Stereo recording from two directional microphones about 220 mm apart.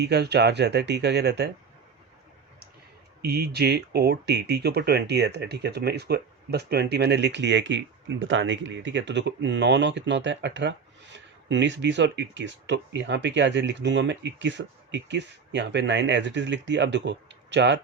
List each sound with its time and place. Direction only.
0.0 s speech: 50° right (ahead or behind)
3.2 s speech: 45° right (ahead or behind)